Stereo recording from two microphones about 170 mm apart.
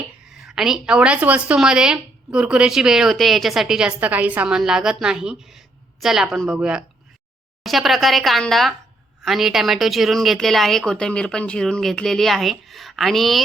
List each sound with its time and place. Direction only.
0.3 s a woman's voice: 5° right (ahead or behind)